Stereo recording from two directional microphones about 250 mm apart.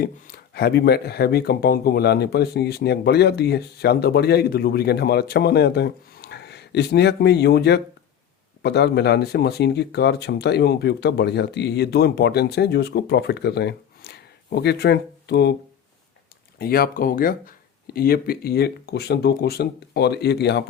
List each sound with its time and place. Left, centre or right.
0.0 s speech: left
16.6 s speech: left